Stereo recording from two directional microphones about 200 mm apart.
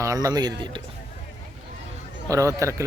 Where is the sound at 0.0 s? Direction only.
15° right (ahead or behind).